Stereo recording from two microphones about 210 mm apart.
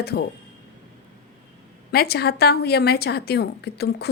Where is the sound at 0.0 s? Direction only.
50° left (ahead or behind).